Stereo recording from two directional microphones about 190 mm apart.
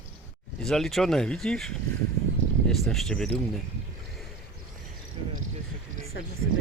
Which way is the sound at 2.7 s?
Centre (ahead or behind).